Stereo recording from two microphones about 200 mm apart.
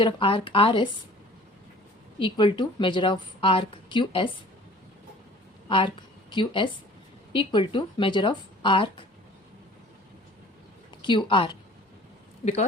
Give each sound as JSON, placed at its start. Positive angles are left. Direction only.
{"t": 0.0, "sound": "a woman's voice", "side_deg": 25}
{"t": 2.1, "sound": "a woman's voice", "side_deg": 25}
{"t": 5.6, "sound": "a woman's voice", "side_deg": 25}
{"t": 10.9, "sound": "a woman's voice", "side_deg": 25}